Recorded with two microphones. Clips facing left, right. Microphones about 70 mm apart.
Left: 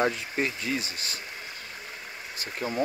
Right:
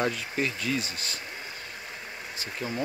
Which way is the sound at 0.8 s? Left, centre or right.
Right.